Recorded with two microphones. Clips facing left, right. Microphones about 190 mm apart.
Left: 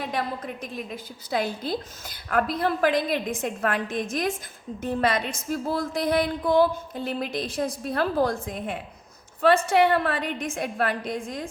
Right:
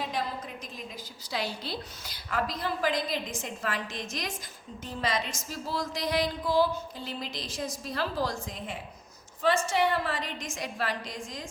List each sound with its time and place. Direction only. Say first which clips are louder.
0.0 s a woman's voice: left 4 dB; 55° left (ahead or behind)